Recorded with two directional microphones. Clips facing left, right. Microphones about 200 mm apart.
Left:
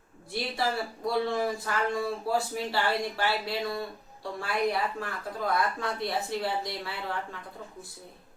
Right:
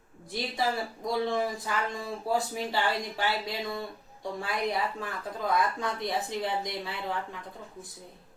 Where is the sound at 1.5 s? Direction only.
15° right (ahead or behind).